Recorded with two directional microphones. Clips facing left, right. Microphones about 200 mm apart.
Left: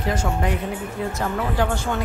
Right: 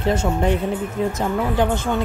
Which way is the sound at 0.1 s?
25° right (ahead or behind).